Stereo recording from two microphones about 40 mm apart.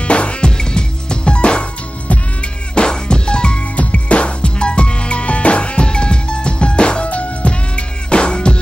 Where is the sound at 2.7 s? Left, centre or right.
Left.